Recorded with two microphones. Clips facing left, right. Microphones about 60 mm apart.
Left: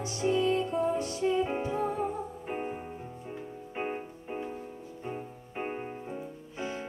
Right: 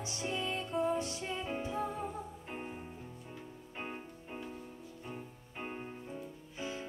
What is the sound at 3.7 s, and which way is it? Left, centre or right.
Music, left.